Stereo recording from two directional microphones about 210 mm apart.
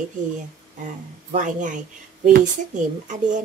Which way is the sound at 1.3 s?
35° right (ahead or behind).